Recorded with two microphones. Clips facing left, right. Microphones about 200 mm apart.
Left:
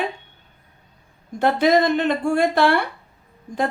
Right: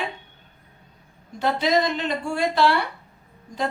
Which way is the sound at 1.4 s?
55° left (ahead or behind).